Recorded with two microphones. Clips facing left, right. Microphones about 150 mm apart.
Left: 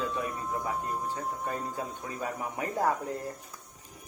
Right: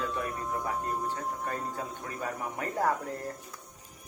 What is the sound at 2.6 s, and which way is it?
Speech, 10° left (ahead or behind).